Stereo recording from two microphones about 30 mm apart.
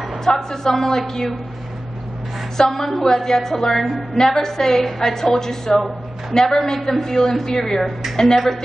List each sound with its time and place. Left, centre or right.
0.2 s a woman's voice: centre
2.5 s a woman's voice: centre
3.8 s a woman's voice: centre
4.2 s a woman's voice: centre